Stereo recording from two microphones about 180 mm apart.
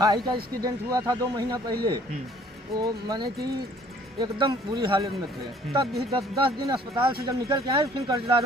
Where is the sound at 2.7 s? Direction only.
20° right (ahead or behind).